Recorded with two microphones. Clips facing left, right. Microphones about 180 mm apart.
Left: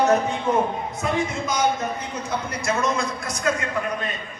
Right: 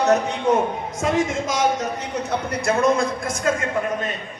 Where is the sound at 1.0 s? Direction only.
90° right; by 3.9 s 50° right (ahead or behind).